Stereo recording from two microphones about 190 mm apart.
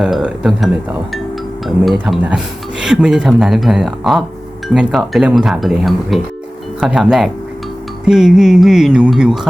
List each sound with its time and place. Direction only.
0.0 s speech: 5° right (ahead or behind)